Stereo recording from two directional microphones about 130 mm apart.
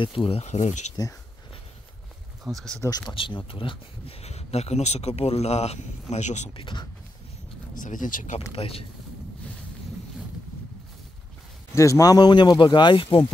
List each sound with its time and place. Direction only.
0.0 s speech: 45° left (ahead or behind)
2.4 s speech: centre (ahead or behind)
3.2 s speech: 40° left (ahead or behind); by 6.5 s 60° left (ahead or behind)
6.5 s speech: 40° left (ahead or behind)
7.7 s speech: 80° left
8.5 s speech: 50° left (ahead or behind)
11.7 s speech: 25° left (ahead or behind); by 13.3 s 40° left (ahead or behind)